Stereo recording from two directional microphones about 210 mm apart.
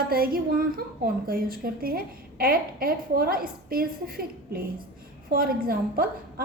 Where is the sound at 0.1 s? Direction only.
45° right (ahead or behind).